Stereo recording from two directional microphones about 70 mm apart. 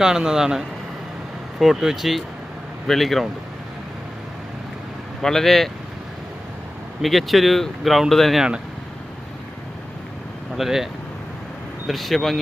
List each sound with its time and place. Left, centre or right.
0.0 s speech: centre
5.2 s speech: centre
7.0 s speech: centre
10.6 s speech: centre
11.9 s speech: centre